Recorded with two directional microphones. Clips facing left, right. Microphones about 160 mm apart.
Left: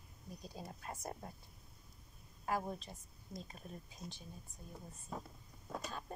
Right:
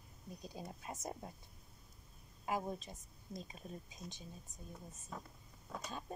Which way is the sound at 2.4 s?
20° right (ahead or behind).